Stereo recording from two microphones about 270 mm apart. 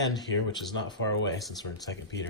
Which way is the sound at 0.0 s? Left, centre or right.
Centre.